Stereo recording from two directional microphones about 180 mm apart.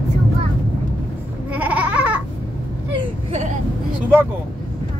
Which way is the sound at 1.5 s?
10° right (ahead or behind).